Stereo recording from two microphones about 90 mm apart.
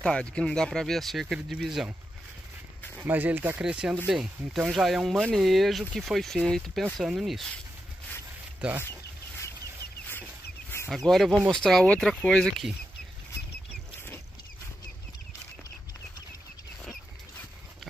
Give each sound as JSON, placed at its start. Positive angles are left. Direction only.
{"t": 0.0, "sound": "speech", "side_deg": 10}
{"t": 3.0, "sound": "speech", "side_deg": -20}
{"t": 8.6, "sound": "speech", "side_deg": -15}
{"t": 10.9, "sound": "speech", "side_deg": 0}